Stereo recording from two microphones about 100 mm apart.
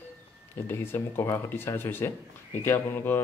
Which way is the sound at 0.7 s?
25° left (ahead or behind).